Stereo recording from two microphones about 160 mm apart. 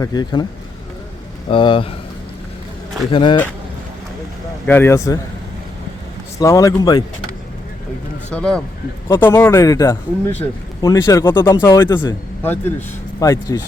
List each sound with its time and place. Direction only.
0.0 s speech: 25° left (ahead or behind)
1.5 s speech: 35° left (ahead or behind)
3.1 s speech: 30° left (ahead or behind)
4.6 s speech: 15° left (ahead or behind)
6.4 s speech: 20° left (ahead or behind)
8.3 s speech: 5° left (ahead or behind)